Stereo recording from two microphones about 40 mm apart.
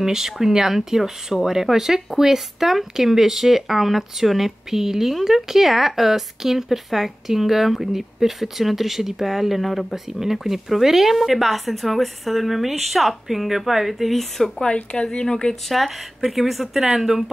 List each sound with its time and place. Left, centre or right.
0.0 s speech: centre
14.6 s a woman's voice: left
15.7 s speech: centre